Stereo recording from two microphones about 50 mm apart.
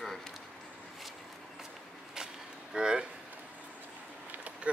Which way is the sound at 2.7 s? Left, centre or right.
Centre.